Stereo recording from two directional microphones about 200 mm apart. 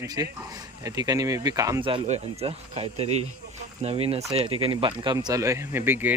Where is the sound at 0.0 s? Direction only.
20° right (ahead or behind).